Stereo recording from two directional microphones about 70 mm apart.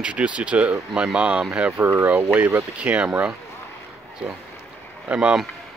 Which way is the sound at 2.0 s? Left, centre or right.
Right.